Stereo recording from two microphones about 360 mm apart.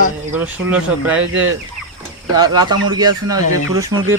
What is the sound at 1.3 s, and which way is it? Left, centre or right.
Fowl, right.